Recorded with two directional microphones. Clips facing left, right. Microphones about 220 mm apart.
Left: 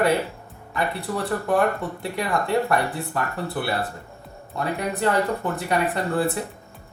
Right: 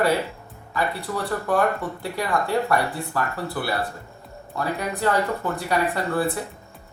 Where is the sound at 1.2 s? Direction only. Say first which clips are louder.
Left 1 dB; 20° left (ahead or behind).